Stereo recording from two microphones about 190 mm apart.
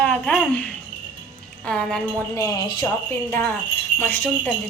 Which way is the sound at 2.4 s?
20° left (ahead or behind).